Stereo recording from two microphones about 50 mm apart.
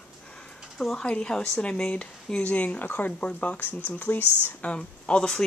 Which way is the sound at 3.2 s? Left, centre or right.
Left.